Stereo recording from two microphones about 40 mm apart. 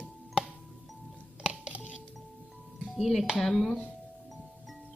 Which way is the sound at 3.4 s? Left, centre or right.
Centre.